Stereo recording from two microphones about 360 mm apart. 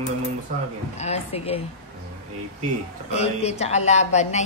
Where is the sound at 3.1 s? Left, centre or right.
Centre.